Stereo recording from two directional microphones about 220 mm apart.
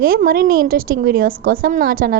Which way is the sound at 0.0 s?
40° right (ahead or behind).